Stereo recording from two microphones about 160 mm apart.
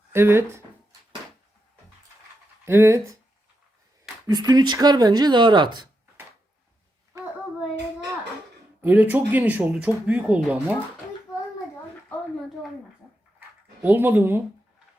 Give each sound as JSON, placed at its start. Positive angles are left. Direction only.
{"t": 0.1, "sound": "speech", "side_deg": -15}
{"t": 2.6, "sound": "speech", "side_deg": -15}
{"t": 4.3, "sound": "speech", "side_deg": -25}
{"t": 8.8, "sound": "speech", "side_deg": -10}
{"t": 13.8, "sound": "speech", "side_deg": -10}